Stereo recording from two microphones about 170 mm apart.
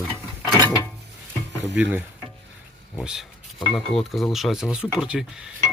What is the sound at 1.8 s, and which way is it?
Speech, 10° right (ahead or behind).